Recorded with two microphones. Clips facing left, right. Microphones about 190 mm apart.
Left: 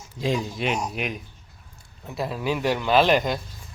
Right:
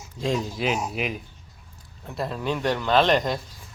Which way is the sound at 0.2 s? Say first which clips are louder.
Even; centre (ahead or behind).